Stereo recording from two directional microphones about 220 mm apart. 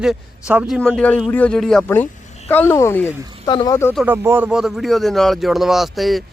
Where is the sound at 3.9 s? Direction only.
10° right (ahead or behind).